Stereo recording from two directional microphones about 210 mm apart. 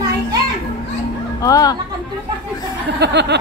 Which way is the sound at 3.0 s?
55° right (ahead or behind).